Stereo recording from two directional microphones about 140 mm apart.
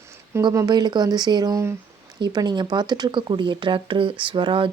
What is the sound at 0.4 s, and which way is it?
Speech, 30° right (ahead or behind).